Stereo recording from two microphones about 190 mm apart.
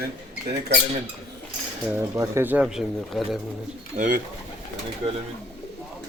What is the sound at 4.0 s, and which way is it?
Speech, 40° right (ahead or behind).